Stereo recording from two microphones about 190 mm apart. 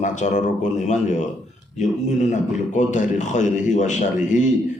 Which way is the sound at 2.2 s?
40° left (ahead or behind).